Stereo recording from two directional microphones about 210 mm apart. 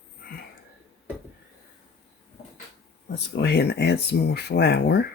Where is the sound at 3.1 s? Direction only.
55° left (ahead or behind).